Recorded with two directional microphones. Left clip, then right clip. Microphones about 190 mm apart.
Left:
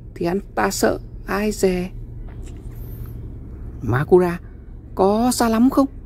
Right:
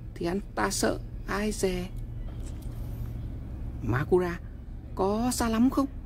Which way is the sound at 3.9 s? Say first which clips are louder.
Left 10 dB; 30° left (ahead or behind).